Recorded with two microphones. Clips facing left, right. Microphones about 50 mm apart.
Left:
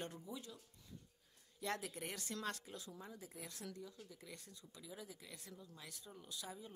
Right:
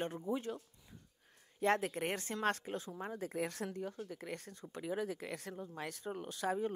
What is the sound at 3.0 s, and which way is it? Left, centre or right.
Speech, right.